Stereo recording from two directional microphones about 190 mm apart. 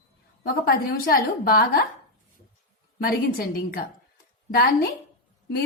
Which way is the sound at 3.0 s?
50° left (ahead or behind).